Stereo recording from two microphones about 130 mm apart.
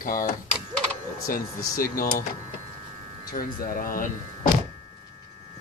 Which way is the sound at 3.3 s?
90° left.